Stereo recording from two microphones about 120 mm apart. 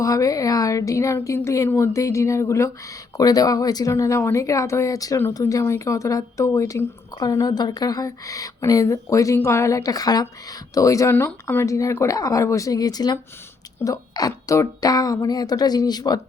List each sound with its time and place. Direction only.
0.0 s speech: 30° left (ahead or behind)